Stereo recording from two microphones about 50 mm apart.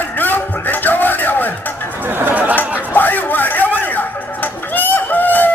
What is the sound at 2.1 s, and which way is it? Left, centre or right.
Chatter, right.